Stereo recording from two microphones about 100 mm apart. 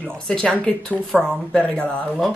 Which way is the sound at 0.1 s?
10° left (ahead or behind).